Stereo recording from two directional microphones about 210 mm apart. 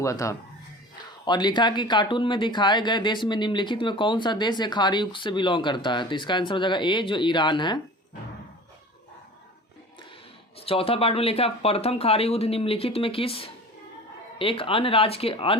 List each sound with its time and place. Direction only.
0.0 s speech: 15° left (ahead or behind)
10.7 s speech: 25° left (ahead or behind)